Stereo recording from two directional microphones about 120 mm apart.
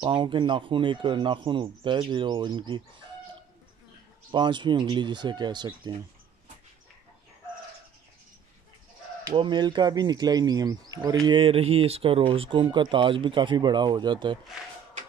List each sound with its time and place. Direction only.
0.0 s speech: 40° right (ahead or behind)
4.3 s speech: 40° right (ahead or behind)
9.3 s speech: 40° right (ahead or behind)
11.2 s speech: 45° right (ahead or behind)